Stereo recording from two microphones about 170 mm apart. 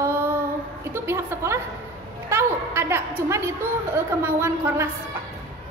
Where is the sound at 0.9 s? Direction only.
15° right (ahead or behind).